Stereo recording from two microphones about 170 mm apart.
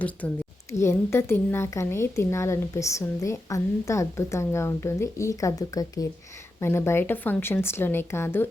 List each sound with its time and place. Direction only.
0.2 s a woman's voice: 10° left (ahead or behind)